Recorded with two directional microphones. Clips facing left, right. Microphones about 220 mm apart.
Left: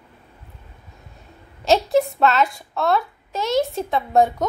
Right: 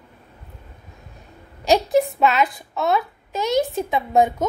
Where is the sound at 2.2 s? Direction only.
15° right (ahead or behind).